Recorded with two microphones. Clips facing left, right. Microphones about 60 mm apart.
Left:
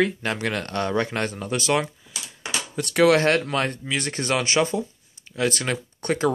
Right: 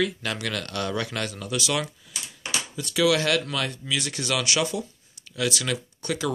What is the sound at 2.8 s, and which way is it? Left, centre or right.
Speech, left.